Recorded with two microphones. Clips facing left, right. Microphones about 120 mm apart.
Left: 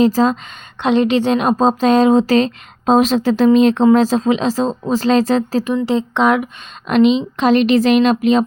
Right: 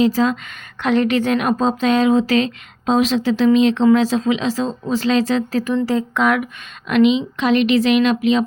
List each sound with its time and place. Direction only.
0.0 s speech: 40° left (ahead or behind)
0.8 s speech: 25° left (ahead or behind)
5.8 s speech: 25° left (ahead or behind); by 8.4 s 40° left (ahead or behind)